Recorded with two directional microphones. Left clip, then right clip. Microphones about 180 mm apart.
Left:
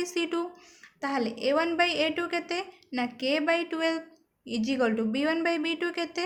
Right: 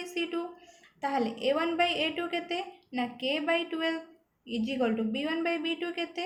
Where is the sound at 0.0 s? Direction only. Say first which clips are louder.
Left 4 dB; 45° left (ahead or behind).